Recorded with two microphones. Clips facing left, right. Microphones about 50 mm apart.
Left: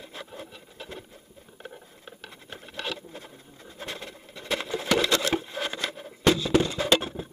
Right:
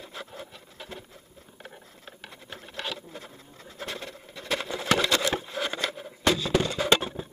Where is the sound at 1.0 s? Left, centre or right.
Centre.